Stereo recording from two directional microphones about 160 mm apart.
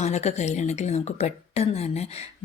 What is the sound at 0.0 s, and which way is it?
Speech, 45° left (ahead or behind).